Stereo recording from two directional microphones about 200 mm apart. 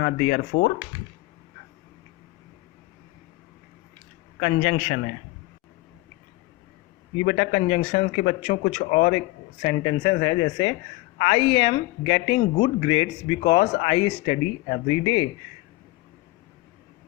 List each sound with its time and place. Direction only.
0.0 s speech: 35° left (ahead or behind)
4.4 s speech: 35° left (ahead or behind)
7.2 s speech: 35° left (ahead or behind)